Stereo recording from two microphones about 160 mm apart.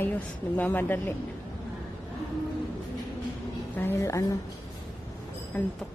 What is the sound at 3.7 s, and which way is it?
Speech, 15° left (ahead or behind).